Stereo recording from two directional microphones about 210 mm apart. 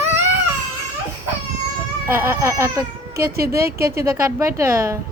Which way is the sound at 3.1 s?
45° right (ahead or behind).